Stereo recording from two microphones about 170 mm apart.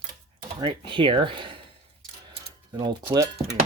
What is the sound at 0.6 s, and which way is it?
Speech, 30° right (ahead or behind).